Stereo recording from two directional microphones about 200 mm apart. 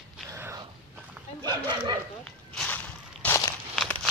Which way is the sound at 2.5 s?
10° left (ahead or behind).